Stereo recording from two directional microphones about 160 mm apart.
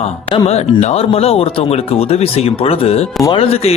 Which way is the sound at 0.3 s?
35° left (ahead or behind).